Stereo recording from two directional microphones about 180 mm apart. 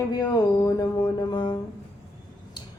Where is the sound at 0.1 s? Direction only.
20° left (ahead or behind).